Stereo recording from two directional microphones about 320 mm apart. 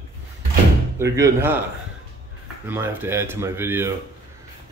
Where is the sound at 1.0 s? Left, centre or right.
Centre.